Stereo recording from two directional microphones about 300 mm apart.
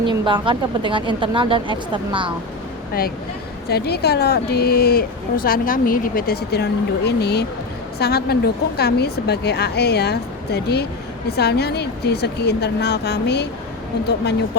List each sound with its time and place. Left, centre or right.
0.0 s speech: centre
3.7 s speech: left